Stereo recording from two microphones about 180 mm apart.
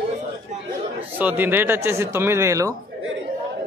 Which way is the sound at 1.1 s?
10° right (ahead or behind).